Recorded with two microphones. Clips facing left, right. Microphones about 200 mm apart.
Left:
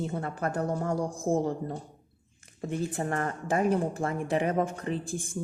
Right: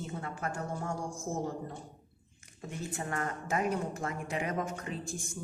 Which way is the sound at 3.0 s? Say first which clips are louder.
Left 5 dB; 35° left (ahead or behind).